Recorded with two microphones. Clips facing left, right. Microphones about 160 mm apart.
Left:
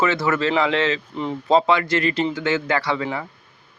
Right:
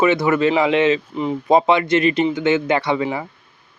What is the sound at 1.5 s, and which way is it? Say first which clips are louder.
Speech: right 3 dB; 20° right (ahead or behind).